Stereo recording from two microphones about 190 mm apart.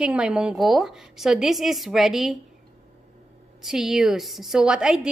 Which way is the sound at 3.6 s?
Centre (ahead or behind).